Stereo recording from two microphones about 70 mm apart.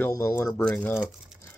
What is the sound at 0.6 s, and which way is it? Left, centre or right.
Speech, centre.